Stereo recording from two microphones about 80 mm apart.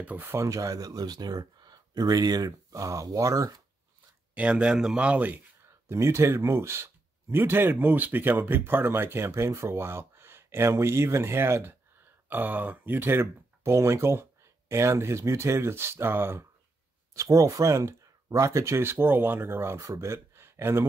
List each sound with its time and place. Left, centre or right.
0.0 s speech: right
0.4 s speech: right
4.4 s speech: centre
5.9 s speech: right
17.1 s speech: right